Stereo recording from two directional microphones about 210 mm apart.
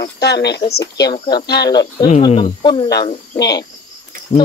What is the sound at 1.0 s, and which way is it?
Speech, 20° left (ahead or behind).